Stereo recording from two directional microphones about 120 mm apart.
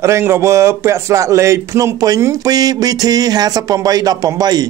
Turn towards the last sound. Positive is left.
turn(degrees=-35)  # may be behind; listen again after turning